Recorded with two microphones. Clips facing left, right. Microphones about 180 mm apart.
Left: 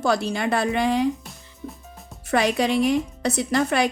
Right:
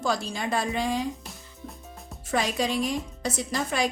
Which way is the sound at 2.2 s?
65° left (ahead or behind).